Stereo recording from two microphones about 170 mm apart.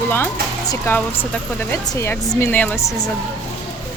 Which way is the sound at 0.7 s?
10° left (ahead or behind).